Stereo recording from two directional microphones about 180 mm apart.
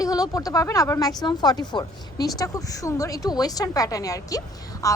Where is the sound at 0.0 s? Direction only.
20° left (ahead or behind).